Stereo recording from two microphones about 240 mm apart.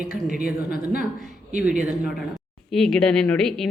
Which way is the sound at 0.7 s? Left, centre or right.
Left.